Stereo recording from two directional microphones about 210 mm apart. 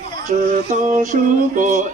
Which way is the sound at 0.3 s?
35° right (ahead or behind).